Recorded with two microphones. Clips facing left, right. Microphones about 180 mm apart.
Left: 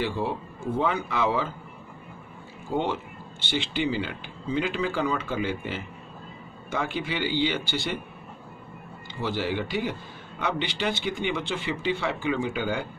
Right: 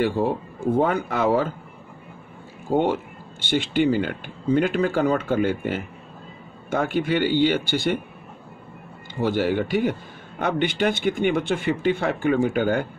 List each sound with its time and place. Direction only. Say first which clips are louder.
0.0 s speech: right 6 dB; 50° right (ahead or behind)
2.7 s speech: right 6 dB; 50° right (ahead or behind)
9.2 s speech: right 7 dB; 50° right (ahead or behind)